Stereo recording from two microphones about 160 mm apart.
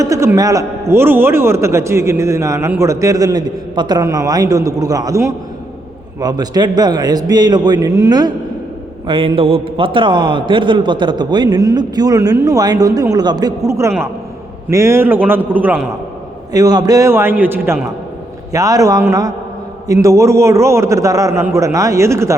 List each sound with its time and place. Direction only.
0.0 s a man's voice: 20° right (ahead or behind)
9.0 s a man's voice: 35° right (ahead or behind); by 15.8 s 10° right (ahead or behind)
16.5 s a man's voice: 25° right (ahead or behind)